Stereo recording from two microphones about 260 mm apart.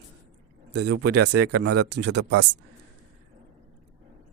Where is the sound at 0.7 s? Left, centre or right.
Right.